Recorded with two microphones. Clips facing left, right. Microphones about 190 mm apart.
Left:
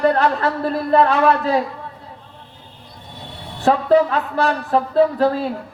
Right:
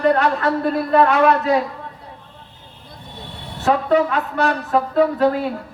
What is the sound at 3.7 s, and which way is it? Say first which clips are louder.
Speech: left 2 dB; 30° left (ahead or behind).